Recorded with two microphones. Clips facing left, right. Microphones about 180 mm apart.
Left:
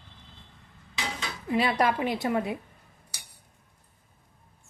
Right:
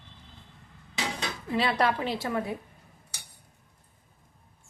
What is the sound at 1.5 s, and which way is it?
A woman's voice, 15° left (ahead or behind).